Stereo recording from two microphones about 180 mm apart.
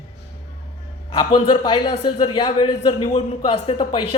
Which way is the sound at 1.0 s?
25° left (ahead or behind).